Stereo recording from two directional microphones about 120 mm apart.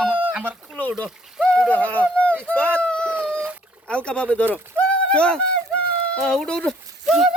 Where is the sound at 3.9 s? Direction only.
10° left (ahead or behind).